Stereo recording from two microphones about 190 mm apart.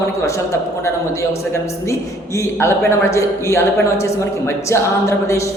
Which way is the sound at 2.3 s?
15° left (ahead or behind).